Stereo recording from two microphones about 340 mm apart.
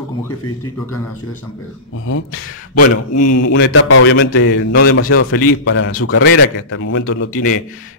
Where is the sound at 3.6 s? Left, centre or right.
Left.